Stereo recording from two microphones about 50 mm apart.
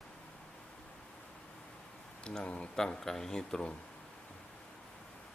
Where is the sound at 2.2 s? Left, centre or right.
Centre.